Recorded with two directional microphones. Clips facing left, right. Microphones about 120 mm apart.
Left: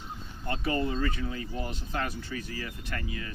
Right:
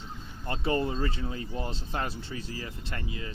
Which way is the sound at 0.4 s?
25° right (ahead or behind).